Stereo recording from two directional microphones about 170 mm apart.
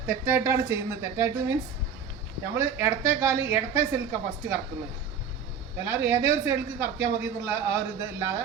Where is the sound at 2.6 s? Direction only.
15° right (ahead or behind).